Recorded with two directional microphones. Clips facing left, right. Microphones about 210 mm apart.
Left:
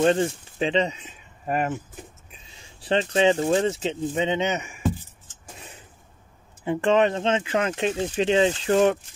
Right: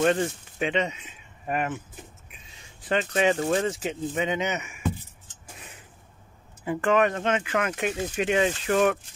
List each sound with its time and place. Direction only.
0.0 s speech: 30° left (ahead or behind)
6.6 s speech: 25° left (ahead or behind)